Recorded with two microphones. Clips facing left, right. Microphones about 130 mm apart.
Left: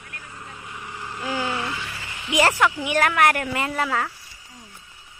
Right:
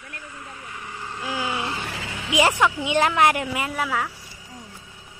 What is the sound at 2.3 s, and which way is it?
A woman's voice, 15° right (ahead or behind).